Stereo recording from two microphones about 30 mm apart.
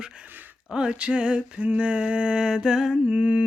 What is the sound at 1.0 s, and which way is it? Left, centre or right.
Music, right.